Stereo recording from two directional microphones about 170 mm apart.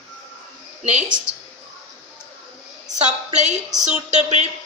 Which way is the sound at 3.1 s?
45° right (ahead or behind).